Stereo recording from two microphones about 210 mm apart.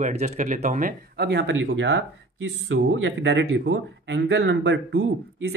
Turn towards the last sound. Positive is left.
turn(degrees=-55)  # may be behind; listen again after turning